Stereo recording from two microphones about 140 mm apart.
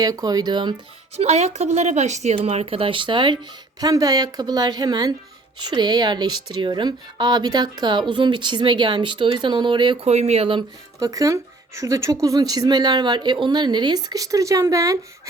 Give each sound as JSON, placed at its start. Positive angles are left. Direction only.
{"t": 0.0, "sound": "speech", "side_deg": -25}
{"t": 1.1, "sound": "a woman's voice", "side_deg": -50}
{"t": 10.1, "sound": "speech", "side_deg": -50}
{"t": 11.0, "sound": "speech", "side_deg": -25}